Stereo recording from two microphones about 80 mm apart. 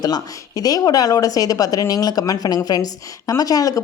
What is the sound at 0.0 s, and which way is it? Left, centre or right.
A woman's voice, left.